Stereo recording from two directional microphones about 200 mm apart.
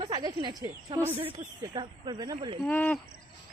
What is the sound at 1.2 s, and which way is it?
Speech, 25° right (ahead or behind).